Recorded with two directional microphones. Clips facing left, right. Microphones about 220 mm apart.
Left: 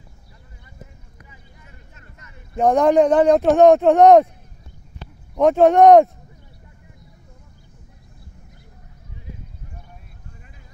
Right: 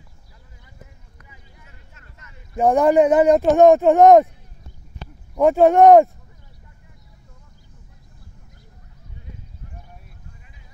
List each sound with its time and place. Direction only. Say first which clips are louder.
2.0 s a sound: left 2 dB; 15° left (ahead or behind)
2.5 s speech: even; 5° right (ahead or behind)
5.3 s speech: even; centre (ahead or behind)